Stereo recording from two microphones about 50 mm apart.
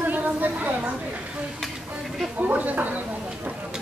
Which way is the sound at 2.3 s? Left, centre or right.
Right.